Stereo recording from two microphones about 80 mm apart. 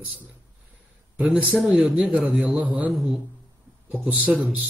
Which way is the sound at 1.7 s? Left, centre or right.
Centre.